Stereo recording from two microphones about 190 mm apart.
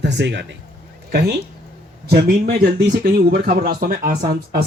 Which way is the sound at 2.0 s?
55° right (ahead or behind).